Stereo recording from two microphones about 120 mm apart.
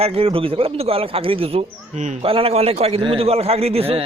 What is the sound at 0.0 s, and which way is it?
A man's voice, 55° right (ahead or behind).